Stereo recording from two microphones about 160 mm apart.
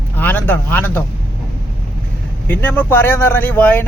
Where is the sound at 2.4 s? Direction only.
10° left (ahead or behind).